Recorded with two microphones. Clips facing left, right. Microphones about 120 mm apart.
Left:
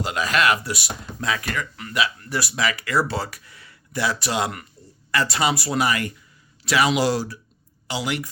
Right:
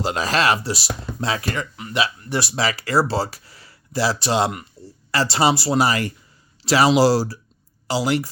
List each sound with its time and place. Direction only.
0.0 s speech: 35° right (ahead or behind)